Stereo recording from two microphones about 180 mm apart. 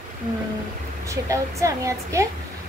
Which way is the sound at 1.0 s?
15° right (ahead or behind).